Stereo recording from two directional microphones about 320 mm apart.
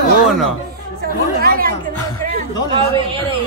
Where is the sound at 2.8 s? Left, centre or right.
Centre.